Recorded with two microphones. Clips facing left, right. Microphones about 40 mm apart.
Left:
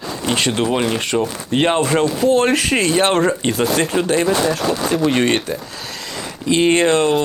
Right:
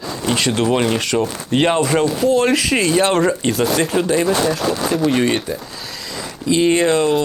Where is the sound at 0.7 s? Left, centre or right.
Centre.